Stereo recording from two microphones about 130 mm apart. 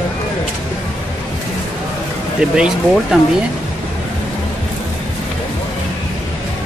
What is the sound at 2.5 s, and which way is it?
Speech, 5° right (ahead or behind).